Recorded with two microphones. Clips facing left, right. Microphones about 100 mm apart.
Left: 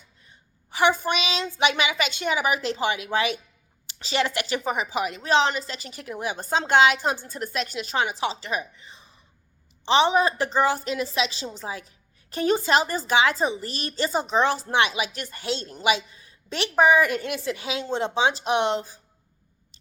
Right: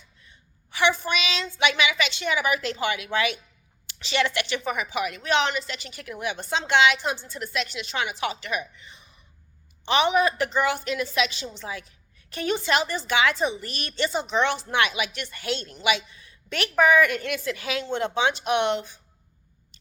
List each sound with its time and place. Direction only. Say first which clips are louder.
0.3 s a woman's voice: left 4 dB; 40° left (ahead or behind)